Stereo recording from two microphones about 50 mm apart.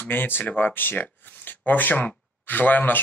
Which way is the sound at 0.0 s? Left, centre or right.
Left.